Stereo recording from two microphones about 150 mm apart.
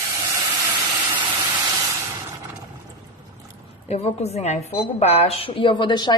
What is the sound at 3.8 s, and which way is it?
A woman's voice, 45° left (ahead or behind).